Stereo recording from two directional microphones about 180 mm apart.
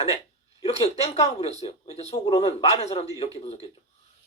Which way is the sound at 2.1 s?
25° left (ahead or behind).